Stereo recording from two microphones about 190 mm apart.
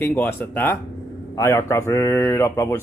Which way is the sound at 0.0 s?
10° left (ahead or behind).